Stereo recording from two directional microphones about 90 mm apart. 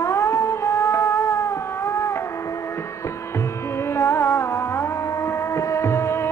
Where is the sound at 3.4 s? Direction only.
30° left (ahead or behind).